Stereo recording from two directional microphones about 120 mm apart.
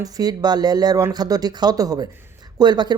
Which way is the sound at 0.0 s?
35° right (ahead or behind).